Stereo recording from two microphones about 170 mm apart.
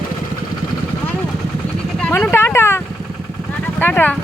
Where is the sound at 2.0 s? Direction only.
10° left (ahead or behind).